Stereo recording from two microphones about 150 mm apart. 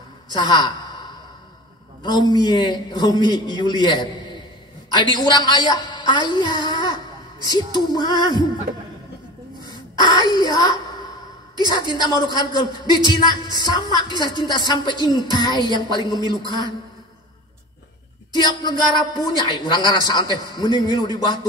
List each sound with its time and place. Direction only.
0.3 s speech: 30° left (ahead or behind)
2.0 s speech: 30° left (ahead or behind)
9.9 s speech: 25° left (ahead or behind)
18.3 s speech: 30° left (ahead or behind)